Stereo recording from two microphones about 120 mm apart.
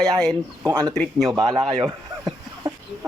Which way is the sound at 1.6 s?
35° right (ahead or behind).